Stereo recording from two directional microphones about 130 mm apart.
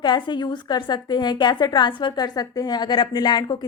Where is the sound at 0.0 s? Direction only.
35° left (ahead or behind).